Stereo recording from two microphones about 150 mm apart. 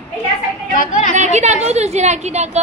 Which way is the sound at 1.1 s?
50° right (ahead or behind).